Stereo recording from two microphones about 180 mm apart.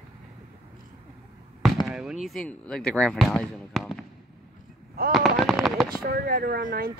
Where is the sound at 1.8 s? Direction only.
5° right (ahead or behind).